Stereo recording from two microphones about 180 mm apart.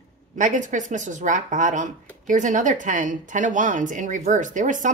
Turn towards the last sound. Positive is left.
turn(degrees=-45)  # may be behind; listen again after turning